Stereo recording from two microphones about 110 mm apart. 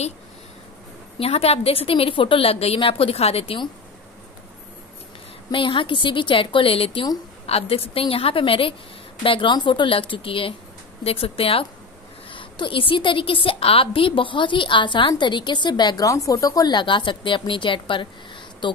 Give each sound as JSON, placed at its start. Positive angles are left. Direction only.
{"t": 1.2, "sound": "a woman's voice", "side_deg": 65}
{"t": 5.5, "sound": "a woman's voice", "side_deg": 50}